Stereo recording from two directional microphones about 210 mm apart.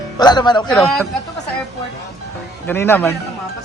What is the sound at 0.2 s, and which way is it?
Speech, 20° left (ahead or behind).